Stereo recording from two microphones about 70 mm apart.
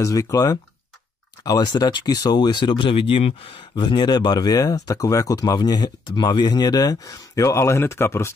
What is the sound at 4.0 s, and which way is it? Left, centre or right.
Speech, left.